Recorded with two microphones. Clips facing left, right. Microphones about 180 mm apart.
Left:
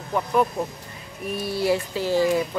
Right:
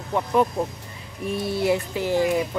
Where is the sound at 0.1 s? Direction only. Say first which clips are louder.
Right 1 dB; 25° right (ahead or behind).